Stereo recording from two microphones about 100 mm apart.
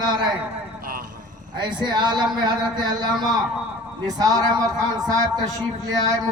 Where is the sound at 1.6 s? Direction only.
50° right (ahead or behind).